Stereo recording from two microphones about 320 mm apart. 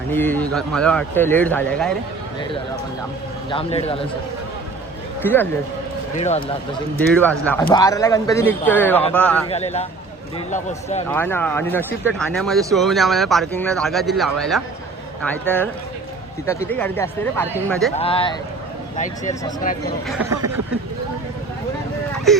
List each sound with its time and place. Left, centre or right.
0.1 s speech: centre
3.5 s speech: centre
5.2 s speech: centre
6.1 s speech: left
7.1 s speech: centre
9.5 s speech: left
11.1 s speech: centre
16.5 s speech: centre
17.9 s speech: centre
20.1 s speech: centre
22.3 s speech: centre